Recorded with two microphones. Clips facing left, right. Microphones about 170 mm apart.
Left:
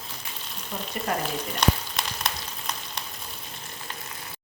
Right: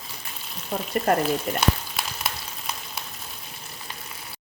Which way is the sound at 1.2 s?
5° right (ahead or behind).